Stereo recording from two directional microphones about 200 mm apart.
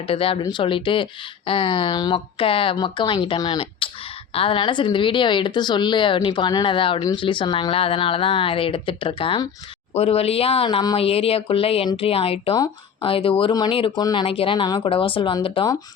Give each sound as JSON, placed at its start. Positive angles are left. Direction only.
{"t": 0.1, "sound": "speech", "side_deg": 30}